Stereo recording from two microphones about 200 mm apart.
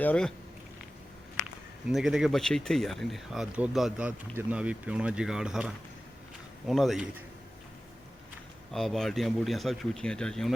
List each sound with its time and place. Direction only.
0.0 s speech: 5° left (ahead or behind)
1.9 s speech: centre (ahead or behind)
8.7 s speech: centre (ahead or behind)